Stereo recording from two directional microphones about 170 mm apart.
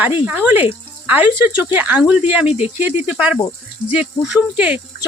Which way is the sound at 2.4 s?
35° left (ahead or behind).